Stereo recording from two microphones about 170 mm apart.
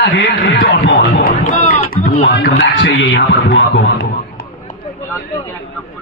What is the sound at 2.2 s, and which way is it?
Speech, 85° left.